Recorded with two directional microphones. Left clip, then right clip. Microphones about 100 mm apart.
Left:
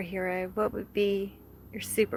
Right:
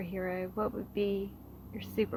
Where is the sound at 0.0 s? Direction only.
45° left (ahead or behind).